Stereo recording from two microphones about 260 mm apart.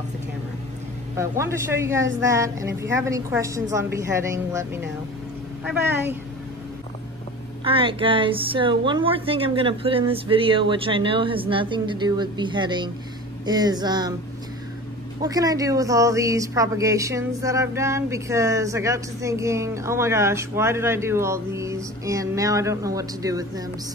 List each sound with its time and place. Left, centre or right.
1.1 s speech: centre
7.6 s speech: right
15.2 s speech: centre